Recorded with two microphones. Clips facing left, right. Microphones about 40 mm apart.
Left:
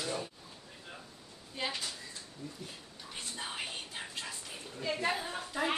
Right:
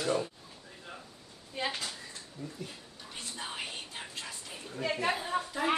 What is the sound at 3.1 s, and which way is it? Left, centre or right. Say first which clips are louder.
Whispering: right 1 dB; centre.